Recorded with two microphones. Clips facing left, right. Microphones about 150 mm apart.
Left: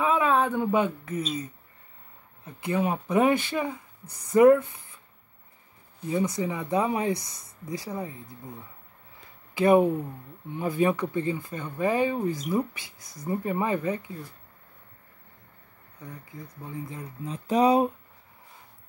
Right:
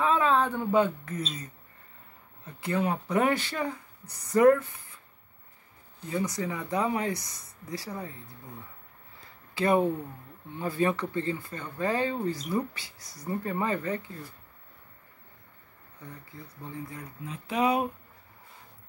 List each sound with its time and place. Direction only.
0.0 s speech: 15° left (ahead or behind)
2.6 s speech: 20° left (ahead or behind)
6.0 s speech: 20° left (ahead or behind)
9.5 s speech: 15° left (ahead or behind)
16.8 s speech: 25° left (ahead or behind)
17.3 s speech: 35° left (ahead or behind)